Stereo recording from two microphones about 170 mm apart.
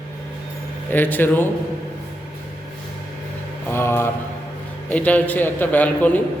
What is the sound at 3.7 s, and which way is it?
Speech, 15° left (ahead or behind).